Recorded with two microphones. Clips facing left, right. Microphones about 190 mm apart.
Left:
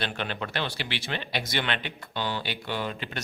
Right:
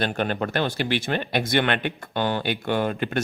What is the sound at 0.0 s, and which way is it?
A man's voice, 45° right (ahead or behind).